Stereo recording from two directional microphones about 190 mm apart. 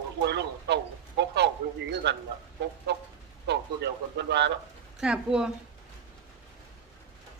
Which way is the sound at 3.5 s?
65° right (ahead or behind).